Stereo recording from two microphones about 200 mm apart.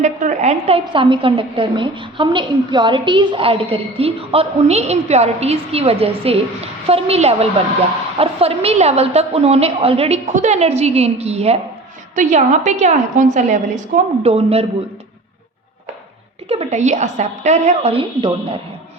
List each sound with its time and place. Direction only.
0.0 s a woman's voice: 35° right (ahead or behind)
16.5 s a woman's voice: 30° right (ahead or behind)